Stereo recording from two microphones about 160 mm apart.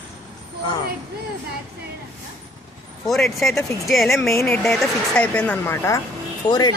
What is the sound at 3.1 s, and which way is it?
Speech, centre (ahead or behind).